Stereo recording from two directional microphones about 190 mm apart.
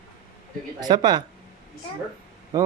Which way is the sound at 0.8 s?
20° right (ahead or behind).